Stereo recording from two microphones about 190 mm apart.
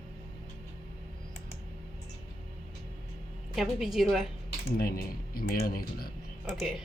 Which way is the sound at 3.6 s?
Centre (ahead or behind).